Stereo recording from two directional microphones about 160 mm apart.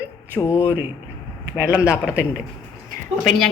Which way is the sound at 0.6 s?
10° right (ahead or behind).